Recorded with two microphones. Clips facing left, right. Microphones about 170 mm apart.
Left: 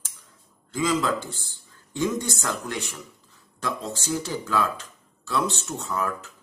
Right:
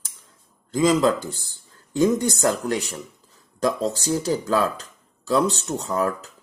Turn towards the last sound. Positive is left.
turn(degrees=-35)  # may be behind; listen again after turning